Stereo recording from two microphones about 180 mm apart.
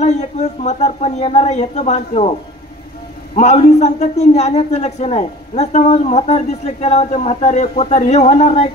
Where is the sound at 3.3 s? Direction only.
35° left (ahead or behind).